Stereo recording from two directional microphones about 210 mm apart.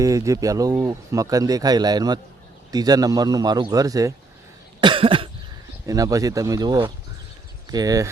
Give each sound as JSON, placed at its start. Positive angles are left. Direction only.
{"t": 0.0, "sound": "speech", "side_deg": -15}
{"t": 4.8, "sound": "cough", "side_deg": -25}
{"t": 5.8, "sound": "speech", "side_deg": -15}